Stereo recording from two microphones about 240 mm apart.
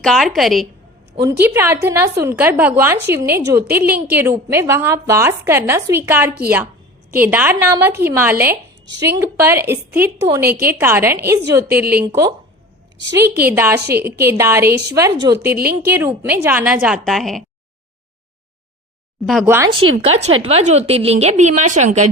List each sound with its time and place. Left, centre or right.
0.0 s a woman's voice: centre
15.5 s speech: right
15.9 s a woman's voice: centre
19.2 s a woman's voice: centre
20.1 s a woman's voice: right